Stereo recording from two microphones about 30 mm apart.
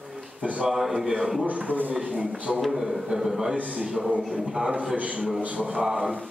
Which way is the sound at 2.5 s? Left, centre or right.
Centre.